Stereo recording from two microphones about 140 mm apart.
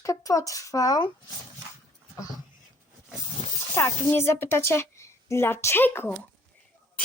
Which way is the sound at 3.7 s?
15° left (ahead or behind).